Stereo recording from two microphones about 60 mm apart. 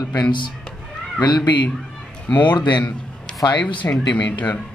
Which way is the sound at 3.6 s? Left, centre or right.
Left.